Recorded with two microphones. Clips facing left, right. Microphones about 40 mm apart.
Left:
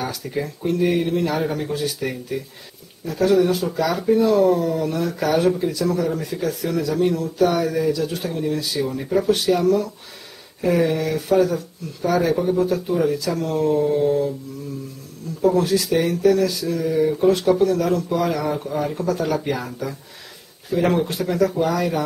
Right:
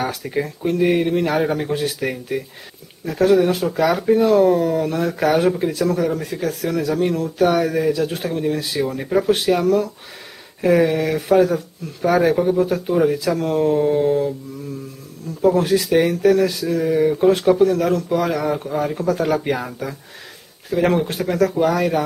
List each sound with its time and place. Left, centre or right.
0.0 s speech: right
3.3 s speech: centre
3.8 s speech: right
6.3 s speech: centre
7.0 s speech: right
8.2 s speech: centre
10.8 s speech: centre
15.4 s speech: centre